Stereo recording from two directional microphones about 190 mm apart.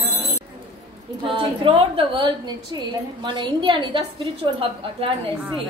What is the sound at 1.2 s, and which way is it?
A woman's voice, 30° right (ahead or behind).